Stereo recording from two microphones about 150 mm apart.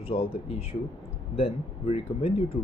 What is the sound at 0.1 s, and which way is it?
Speech, 40° left (ahead or behind).